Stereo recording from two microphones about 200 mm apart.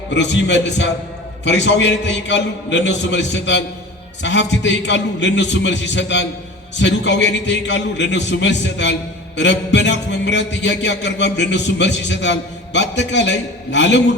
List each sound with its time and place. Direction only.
0.1 s a man's voice: 60° left (ahead or behind)